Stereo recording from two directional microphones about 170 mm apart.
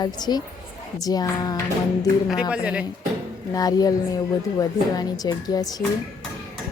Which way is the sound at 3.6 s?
20° left (ahead or behind).